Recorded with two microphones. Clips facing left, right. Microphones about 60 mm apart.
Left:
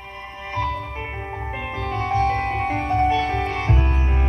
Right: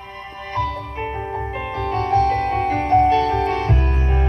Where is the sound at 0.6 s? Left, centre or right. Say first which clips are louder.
Right 2 dB; left.